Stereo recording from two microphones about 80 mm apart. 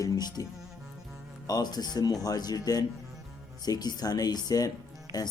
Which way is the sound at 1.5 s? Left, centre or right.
Left.